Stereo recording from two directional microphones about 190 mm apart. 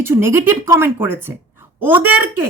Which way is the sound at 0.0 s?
10° right (ahead or behind).